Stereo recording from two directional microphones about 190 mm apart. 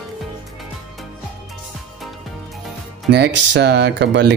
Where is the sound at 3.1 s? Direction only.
65° right (ahead or behind).